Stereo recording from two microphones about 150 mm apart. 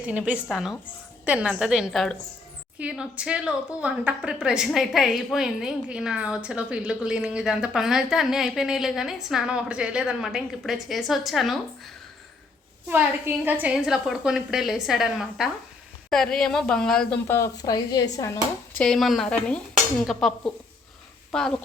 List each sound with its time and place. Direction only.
0.0 s a woman's voice: 10° right (ahead or behind)
12.9 s a woman's voice: 15° right (ahead or behind); by 17.2 s 5° left (ahead or behind)
17.2 s speech: 20° left (ahead or behind)
18.8 s a woman's voice: centre (ahead or behind)